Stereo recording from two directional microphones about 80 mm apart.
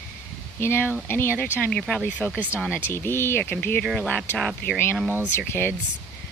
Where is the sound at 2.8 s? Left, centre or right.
Left.